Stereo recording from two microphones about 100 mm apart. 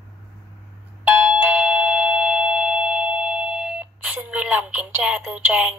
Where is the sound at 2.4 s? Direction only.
15° right (ahead or behind).